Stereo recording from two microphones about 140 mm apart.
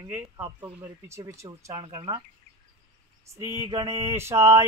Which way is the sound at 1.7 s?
35° right (ahead or behind).